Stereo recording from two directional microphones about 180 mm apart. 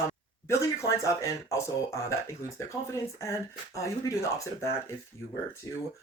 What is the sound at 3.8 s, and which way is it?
Speech, 15° left (ahead or behind).